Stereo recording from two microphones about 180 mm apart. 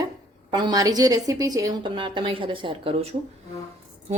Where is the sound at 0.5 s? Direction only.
20° right (ahead or behind).